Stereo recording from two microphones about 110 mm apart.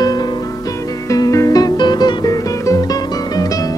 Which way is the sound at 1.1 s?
30° left (ahead or behind).